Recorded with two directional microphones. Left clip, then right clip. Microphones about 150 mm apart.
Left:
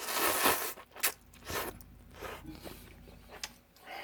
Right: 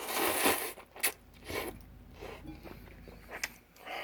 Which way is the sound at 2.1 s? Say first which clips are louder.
Left 3 dB; 30° left (ahead or behind).